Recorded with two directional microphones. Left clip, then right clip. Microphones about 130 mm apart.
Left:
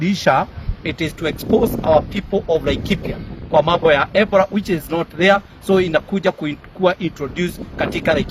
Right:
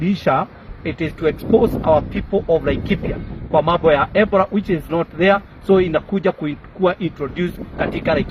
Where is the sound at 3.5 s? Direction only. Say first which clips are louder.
Left 1 dB; 45° left (ahead or behind).